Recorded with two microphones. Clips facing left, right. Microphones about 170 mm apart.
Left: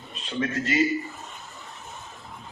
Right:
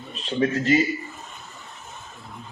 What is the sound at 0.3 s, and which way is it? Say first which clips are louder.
Speech: right 6 dB; 30° right (ahead or behind).